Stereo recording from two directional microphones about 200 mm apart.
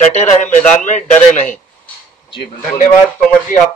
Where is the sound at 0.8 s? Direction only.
40° left (ahead or behind).